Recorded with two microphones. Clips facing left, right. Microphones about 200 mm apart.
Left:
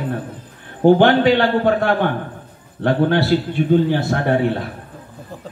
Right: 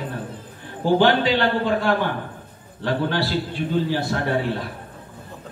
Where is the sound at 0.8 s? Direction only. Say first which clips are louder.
Left 6 dB; 55° left (ahead or behind).